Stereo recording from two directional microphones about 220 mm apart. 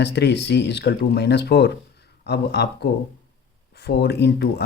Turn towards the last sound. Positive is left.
turn(degrees=50)  # may be behind; listen again after turning